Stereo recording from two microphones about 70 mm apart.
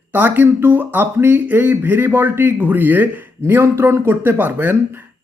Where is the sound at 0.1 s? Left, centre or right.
Right.